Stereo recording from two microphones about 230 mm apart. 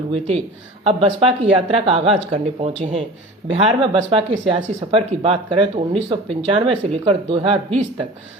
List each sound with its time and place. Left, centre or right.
0.1 s speech: right